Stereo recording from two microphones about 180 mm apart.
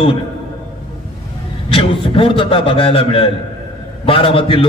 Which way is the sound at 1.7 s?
30° left (ahead or behind).